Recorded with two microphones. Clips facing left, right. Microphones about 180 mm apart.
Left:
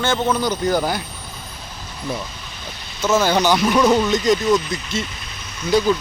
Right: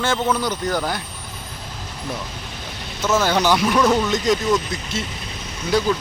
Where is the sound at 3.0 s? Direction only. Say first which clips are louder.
Left 2 dB; centre (ahead or behind).